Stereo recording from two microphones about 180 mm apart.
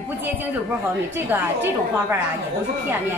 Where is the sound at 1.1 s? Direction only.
10° right (ahead or behind).